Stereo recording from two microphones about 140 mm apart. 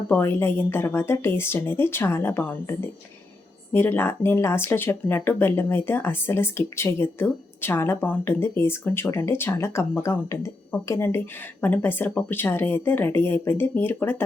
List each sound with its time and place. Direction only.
0.1 s speech: 15° left (ahead or behind)